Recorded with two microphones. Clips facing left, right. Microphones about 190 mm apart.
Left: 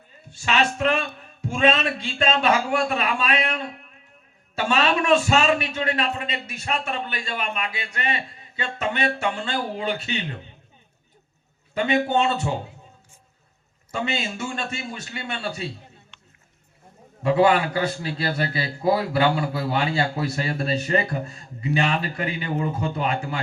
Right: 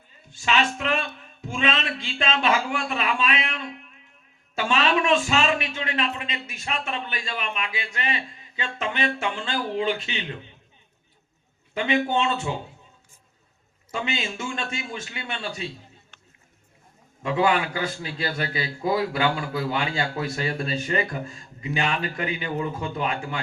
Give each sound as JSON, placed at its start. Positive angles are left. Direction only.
{"t": 0.4, "sound": "a man's voice", "side_deg": 40}
{"t": 11.8, "sound": "a man's voice", "side_deg": 40}
{"t": 14.0, "sound": "a man's voice", "side_deg": 35}
{"t": 17.2, "sound": "a man's voice", "side_deg": 35}